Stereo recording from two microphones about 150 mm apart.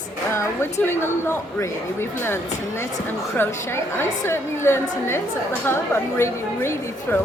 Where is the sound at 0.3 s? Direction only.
15° left (ahead or behind).